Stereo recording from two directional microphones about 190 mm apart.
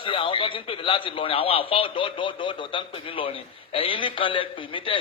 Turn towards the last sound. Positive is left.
turn(degrees=25)  # may be behind; listen again after turning